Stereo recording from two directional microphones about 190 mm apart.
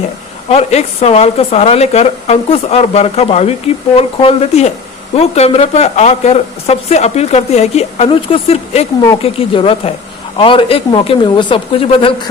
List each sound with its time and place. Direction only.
0.4 s speech: 35° left (ahead or behind)